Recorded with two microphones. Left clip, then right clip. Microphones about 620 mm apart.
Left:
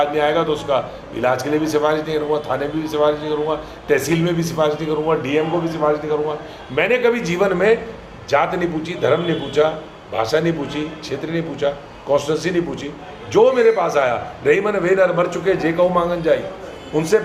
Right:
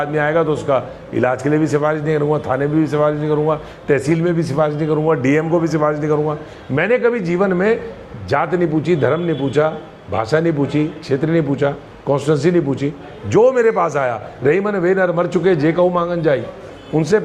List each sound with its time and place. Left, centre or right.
0.2 s a man's voice: right